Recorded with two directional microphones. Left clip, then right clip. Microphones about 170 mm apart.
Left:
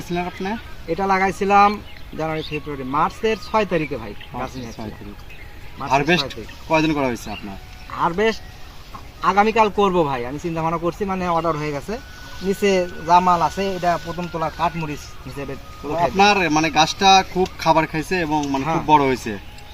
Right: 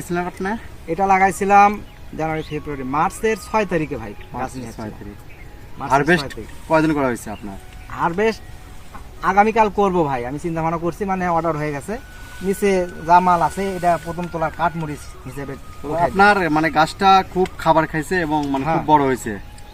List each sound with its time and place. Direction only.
0.1 s speech: 10° right (ahead or behind)
0.9 s speech: 35° right (ahead or behind)
5.9 s speech: 5° right (ahead or behind)
7.9 s speech: 25° right (ahead or behind)
12.5 s speech: 20° right (ahead or behind)
13.1 s speech: 30° right (ahead or behind)
13.4 s speech: 20° right (ahead or behind)
18.4 s speech: 20° right (ahead or behind)
18.9 s speech: 10° right (ahead or behind)